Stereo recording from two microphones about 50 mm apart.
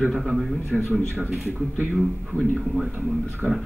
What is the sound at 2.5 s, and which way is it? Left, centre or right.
Speech, centre.